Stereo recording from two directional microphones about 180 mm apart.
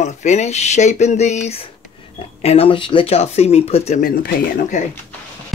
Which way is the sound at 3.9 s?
50° left (ahead or behind).